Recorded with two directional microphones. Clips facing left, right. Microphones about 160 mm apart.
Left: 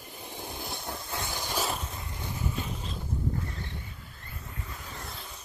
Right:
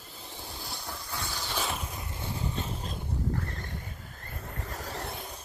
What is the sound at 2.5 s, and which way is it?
Boat, 40° right (ahead or behind).